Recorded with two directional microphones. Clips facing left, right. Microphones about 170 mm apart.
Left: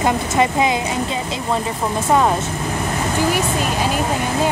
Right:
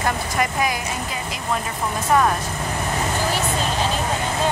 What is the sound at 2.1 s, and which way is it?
Speech, 20° left (ahead or behind).